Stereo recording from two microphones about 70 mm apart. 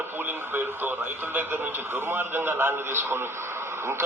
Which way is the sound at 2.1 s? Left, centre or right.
Right.